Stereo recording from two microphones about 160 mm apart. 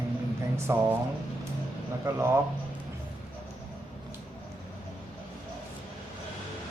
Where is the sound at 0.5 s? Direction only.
15° right (ahead or behind).